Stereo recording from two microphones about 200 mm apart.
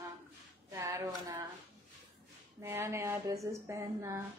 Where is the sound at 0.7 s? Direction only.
15° right (ahead or behind).